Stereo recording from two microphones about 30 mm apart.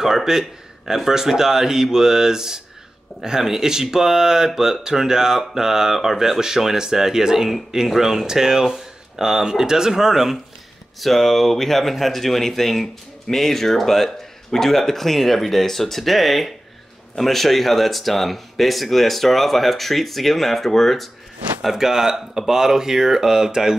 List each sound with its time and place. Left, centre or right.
0.0 s speech: centre
11.0 s speech: centre
21.7 s speech: centre